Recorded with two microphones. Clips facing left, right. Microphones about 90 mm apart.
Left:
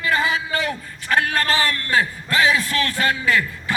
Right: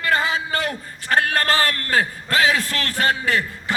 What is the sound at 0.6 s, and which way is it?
A man's voice, 45° right (ahead or behind).